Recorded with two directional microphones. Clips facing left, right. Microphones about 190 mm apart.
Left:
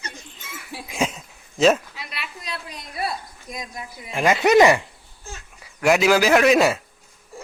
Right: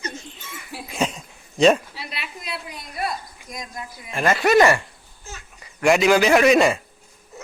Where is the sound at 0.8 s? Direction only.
10° left (ahead or behind).